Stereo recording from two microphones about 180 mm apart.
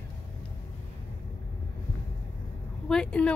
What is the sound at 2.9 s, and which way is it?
Speech, 5° left (ahead or behind).